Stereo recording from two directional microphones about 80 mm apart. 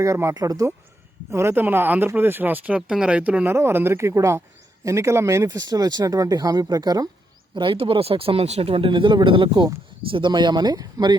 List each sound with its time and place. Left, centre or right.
0.0 s speech: right
1.3 s speech: right; by 3.4 s centre
3.4 s speech: right
7.5 s speech: right
10.2 s speech: right